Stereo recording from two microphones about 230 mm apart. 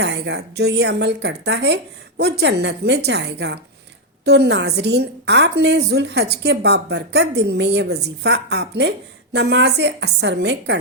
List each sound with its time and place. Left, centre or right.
0.0 s a woman's voice: right